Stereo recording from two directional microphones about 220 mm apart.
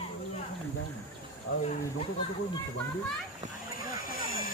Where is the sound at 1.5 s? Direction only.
60° left (ahead or behind).